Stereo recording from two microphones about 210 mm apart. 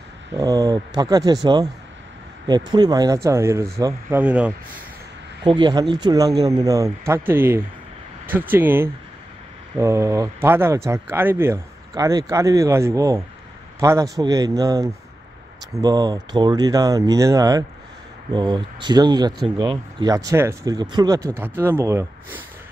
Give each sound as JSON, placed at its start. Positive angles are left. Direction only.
{"t": 0.4, "sound": "speech", "side_deg": -15}
{"t": 5.4, "sound": "speech", "side_deg": -20}